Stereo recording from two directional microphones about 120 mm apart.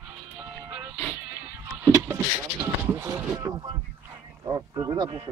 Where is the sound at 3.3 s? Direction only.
30° right (ahead or behind).